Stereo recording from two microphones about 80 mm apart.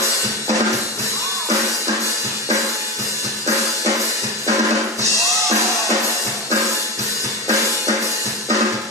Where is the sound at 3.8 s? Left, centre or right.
Right.